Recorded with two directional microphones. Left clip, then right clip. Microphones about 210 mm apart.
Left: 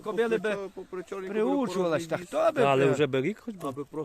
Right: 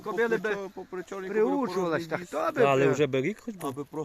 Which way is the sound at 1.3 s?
55° left (ahead or behind).